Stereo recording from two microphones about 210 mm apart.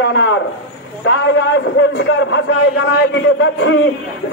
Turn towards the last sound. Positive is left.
turn(degrees=60)  # may be behind; listen again after turning